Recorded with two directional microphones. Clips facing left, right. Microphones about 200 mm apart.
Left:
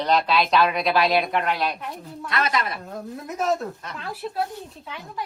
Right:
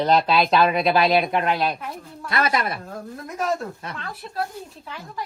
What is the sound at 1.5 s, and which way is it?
Speech, centre (ahead or behind).